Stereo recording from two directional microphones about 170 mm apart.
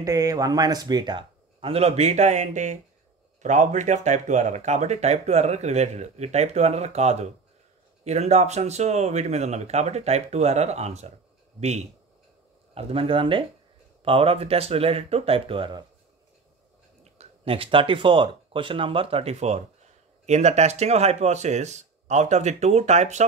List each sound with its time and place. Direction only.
0.0 s speech: 20° right (ahead or behind)
17.0 s speech: 35° right (ahead or behind)